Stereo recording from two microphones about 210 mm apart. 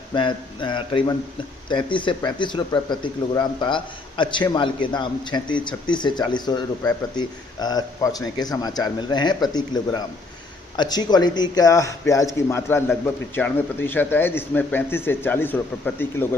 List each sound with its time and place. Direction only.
0.1 s a man's voice: 20° left (ahead or behind)